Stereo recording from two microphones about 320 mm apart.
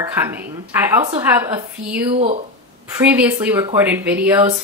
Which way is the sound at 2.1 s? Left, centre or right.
Centre.